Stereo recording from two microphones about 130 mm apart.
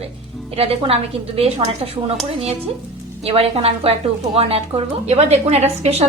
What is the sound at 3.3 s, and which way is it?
Speech, 50° right (ahead or behind).